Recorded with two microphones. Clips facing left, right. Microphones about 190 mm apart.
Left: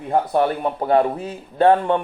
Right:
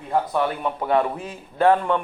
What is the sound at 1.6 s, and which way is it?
Speech, 25° left (ahead or behind).